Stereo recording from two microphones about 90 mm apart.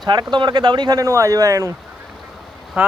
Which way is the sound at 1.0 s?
35° right (ahead or behind).